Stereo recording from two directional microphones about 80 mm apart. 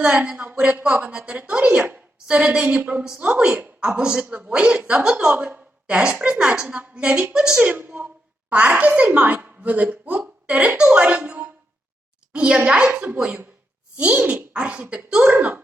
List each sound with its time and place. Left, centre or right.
0.0 s a woman's voice: centre